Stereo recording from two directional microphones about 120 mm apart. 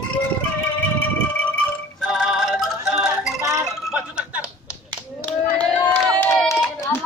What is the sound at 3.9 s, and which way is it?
Music, 5° right (ahead or behind).